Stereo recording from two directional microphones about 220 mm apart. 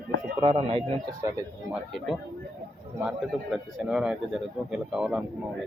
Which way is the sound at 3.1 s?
Centre (ahead or behind).